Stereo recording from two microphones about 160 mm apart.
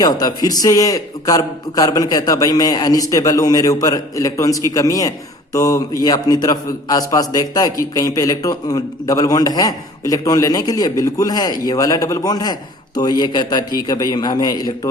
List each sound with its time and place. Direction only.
0.0 s a man's voice: 25° left (ahead or behind)